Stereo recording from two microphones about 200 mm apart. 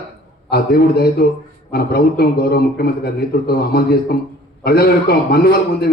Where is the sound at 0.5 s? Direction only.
50° left (ahead or behind).